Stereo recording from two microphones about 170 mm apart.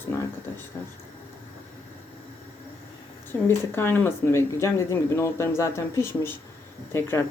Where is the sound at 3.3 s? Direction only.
15° left (ahead or behind).